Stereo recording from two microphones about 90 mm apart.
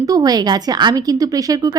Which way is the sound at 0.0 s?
45° right (ahead or behind).